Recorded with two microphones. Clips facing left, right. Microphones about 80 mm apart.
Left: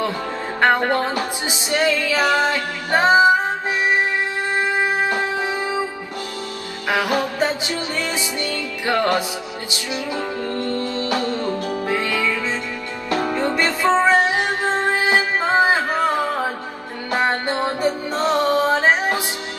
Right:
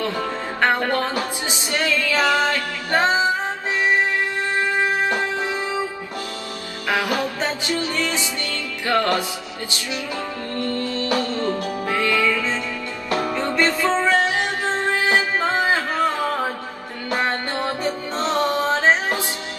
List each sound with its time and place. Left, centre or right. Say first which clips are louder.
0.6 s music: left 3 dB; left
4.6 s music: left 1 dB; centre
6.9 s music: left 2 dB; left
10.5 s music: right 2 dB; left